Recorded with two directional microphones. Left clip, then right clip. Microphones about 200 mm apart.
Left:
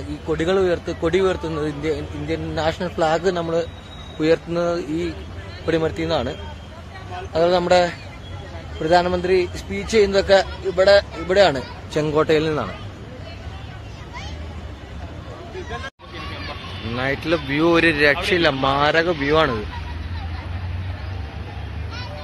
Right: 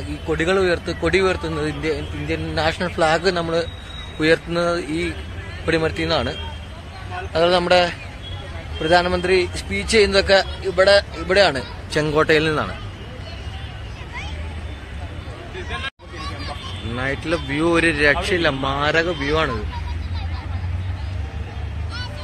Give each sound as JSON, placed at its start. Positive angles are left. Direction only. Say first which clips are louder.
{"t": 0.3, "sound": "a man's voice", "louder": "right 1 dB", "side_deg": 0}
{"t": 7.3, "sound": "a man's voice", "louder": "even", "side_deg": 0}
{"t": 16.9, "sound": "speech", "louder": "left 2 dB", "side_deg": 5}